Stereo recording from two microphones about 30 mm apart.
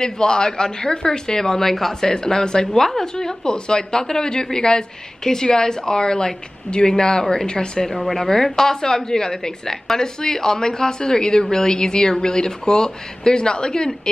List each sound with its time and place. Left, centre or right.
0.0 s a woman's voice: left; by 2.0 s centre
2.0 s a woman's voice: left
7.9 s speech: centre
8.5 s a woman's voice: centre